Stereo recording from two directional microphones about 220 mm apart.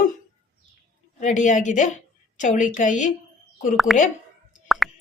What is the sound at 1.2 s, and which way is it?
Speech, 35° left (ahead or behind).